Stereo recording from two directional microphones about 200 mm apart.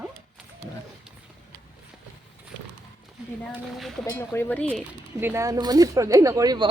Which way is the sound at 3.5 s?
Centre (ahead or behind).